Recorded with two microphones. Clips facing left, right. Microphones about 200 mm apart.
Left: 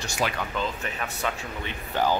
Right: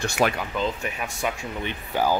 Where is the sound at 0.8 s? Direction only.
15° right (ahead or behind).